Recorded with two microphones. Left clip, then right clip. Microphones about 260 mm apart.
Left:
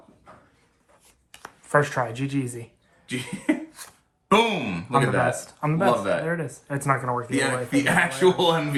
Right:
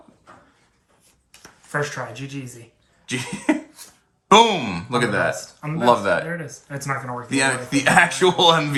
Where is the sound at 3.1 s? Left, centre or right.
Right.